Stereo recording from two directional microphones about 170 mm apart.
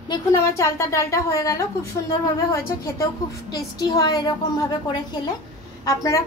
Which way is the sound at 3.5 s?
20° left (ahead or behind).